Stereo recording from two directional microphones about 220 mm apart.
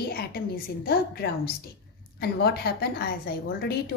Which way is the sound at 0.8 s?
45° left (ahead or behind).